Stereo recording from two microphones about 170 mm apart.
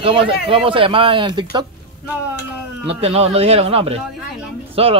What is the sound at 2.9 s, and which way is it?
Speech, 35° right (ahead or behind).